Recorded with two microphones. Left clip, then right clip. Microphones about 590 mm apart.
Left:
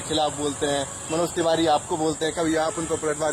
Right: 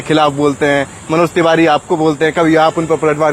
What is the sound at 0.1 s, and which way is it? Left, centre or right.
Speech, right.